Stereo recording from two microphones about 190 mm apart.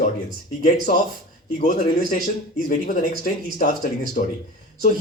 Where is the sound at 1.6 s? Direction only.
45° left (ahead or behind).